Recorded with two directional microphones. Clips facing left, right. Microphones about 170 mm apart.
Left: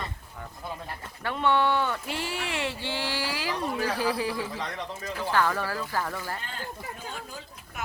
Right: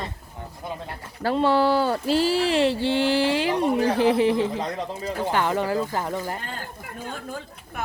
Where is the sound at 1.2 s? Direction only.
30° right (ahead or behind).